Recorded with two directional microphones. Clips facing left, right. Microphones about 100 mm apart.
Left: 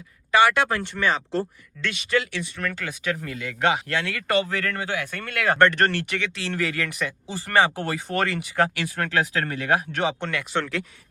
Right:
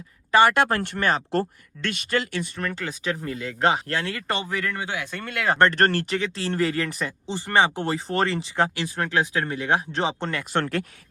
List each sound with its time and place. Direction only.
0.3 s speech: 40° right (ahead or behind)
2.6 s speech: 25° right (ahead or behind)
4.4 s speech: 15° right (ahead or behind); by 10.4 s 30° right (ahead or behind)
10.5 s speech: 50° right (ahead or behind)